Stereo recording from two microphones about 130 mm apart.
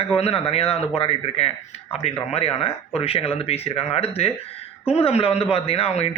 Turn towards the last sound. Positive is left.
turn(degrees=50)  # may be behind; listen again after turning